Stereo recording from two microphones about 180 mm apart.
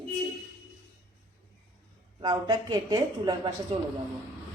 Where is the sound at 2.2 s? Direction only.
25° right (ahead or behind).